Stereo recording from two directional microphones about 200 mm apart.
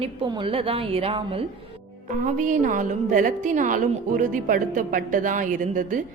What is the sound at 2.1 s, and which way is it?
A woman's voice, 40° right (ahead or behind).